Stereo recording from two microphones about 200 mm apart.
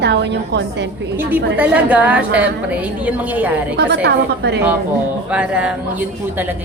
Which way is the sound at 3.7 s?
60° right (ahead or behind).